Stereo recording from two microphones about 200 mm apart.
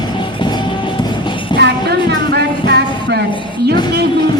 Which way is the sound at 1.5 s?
55° right (ahead or behind).